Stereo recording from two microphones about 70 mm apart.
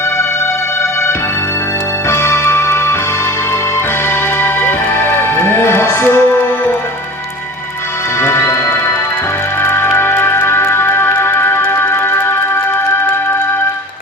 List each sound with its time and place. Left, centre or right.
2.0 s music: left
4.4 s music: left
8.2 s music: left
9.6 s music: left